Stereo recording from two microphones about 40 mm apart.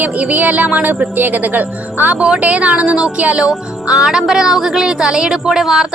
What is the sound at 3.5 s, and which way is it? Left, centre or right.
A woman's voice, centre.